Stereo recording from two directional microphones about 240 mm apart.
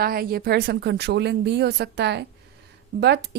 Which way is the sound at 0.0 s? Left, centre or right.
Right.